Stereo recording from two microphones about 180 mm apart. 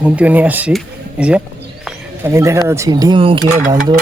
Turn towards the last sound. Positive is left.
turn(degrees=-25)  # may be behind; listen again after turning